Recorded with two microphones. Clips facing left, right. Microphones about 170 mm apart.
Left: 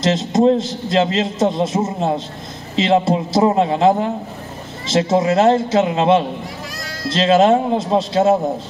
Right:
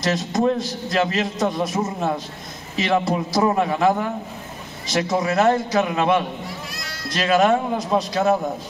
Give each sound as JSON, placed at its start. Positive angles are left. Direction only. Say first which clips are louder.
{"t": 0.0, "sound": "a man's voice", "louder": "left 6 dB", "side_deg": 25}